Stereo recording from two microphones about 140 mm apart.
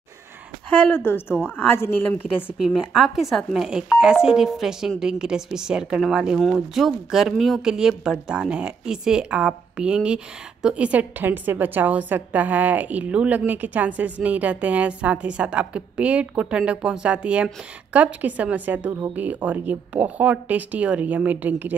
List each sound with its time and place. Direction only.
0.7 s a woman's voice: 15° left (ahead or behind)
2.7 s speech: 5° right (ahead or behind)